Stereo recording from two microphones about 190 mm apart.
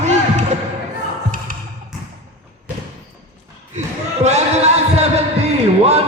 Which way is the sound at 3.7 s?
35° right (ahead or behind).